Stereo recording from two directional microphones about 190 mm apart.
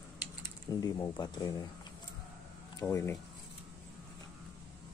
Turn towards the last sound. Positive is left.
turn(degrees=15)  # may be behind; listen again after turning